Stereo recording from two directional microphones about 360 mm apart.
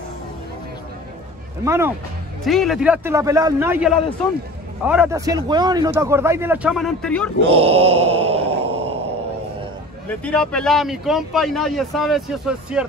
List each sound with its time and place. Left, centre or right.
1.6 s a man's voice: centre
7.4 s mantra: centre
10.0 s speech: centre